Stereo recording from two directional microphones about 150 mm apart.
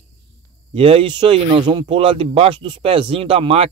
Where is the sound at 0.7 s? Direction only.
35° right (ahead or behind).